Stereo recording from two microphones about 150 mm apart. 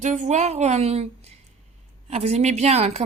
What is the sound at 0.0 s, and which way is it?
A woman's voice, 55° right (ahead or behind).